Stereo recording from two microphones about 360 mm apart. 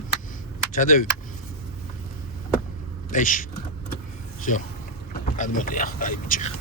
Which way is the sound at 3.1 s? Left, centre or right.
Left.